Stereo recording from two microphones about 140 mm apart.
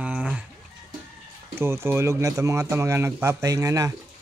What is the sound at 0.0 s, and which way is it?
Chicken, 10° right (ahead or behind).